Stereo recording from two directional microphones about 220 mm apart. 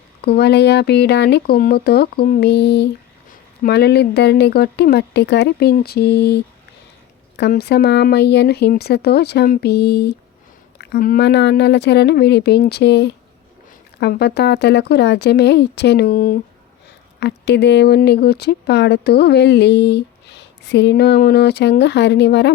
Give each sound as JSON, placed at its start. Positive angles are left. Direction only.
{"t": 0.3, "sound": "speech", "side_deg": 50}